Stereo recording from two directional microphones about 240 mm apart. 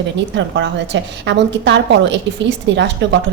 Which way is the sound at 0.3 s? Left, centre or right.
Right.